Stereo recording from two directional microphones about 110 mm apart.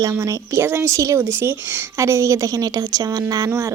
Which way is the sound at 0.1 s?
25° right (ahead or behind).